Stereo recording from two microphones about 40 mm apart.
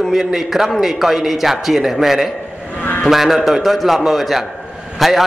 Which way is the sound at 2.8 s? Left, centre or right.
Left.